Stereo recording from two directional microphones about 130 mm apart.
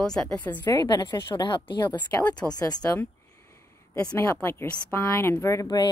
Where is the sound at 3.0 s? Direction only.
20° left (ahead or behind).